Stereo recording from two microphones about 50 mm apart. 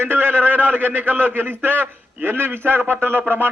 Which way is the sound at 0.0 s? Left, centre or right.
Right.